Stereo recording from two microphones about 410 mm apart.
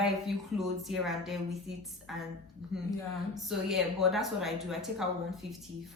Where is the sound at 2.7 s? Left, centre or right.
Right.